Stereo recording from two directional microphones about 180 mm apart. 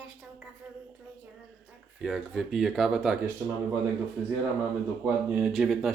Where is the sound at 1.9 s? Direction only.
Centre (ahead or behind).